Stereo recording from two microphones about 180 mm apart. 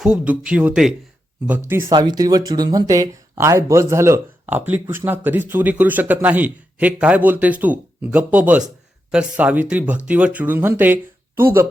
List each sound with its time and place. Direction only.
0.0 s a man's voice: 5° right (ahead or behind)
1.9 s a man's voice: 25° right (ahead or behind)